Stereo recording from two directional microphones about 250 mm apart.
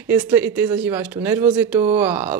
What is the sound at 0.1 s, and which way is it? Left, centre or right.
Speech, centre.